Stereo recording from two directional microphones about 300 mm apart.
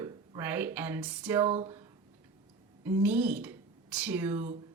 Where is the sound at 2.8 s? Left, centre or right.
Centre.